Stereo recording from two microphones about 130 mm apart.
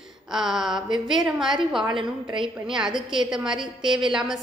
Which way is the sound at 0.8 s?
35° right (ahead or behind).